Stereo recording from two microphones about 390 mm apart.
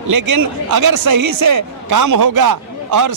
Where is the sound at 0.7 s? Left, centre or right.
Right.